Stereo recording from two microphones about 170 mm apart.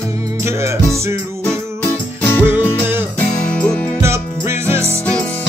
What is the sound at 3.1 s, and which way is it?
Music, 5° left (ahead or behind).